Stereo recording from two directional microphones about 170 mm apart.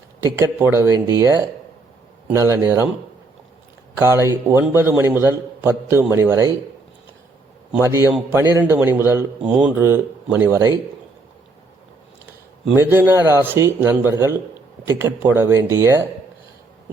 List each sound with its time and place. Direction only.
0.2 s a man's voice: 15° right (ahead or behind)
3.9 s a man's voice: 15° right (ahead or behind)
7.7 s a man's voice: 15° right (ahead or behind)
12.7 s a man's voice: 15° right (ahead or behind)